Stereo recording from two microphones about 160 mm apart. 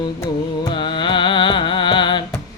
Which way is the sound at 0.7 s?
30° left (ahead or behind).